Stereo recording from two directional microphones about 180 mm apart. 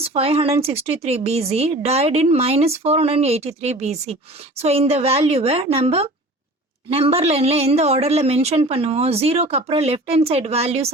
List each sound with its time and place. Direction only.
0.0 s a woman's voice: 35° right (ahead or behind)